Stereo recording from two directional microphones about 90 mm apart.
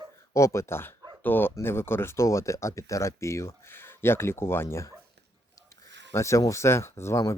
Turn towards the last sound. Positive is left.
turn(degrees=30)  # may be behind; listen again after turning